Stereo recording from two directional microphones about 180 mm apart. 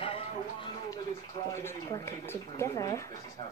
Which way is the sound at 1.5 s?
15° left (ahead or behind).